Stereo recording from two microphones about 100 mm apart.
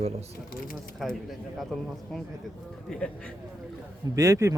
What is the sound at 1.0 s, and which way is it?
Speech, centre (ahead or behind).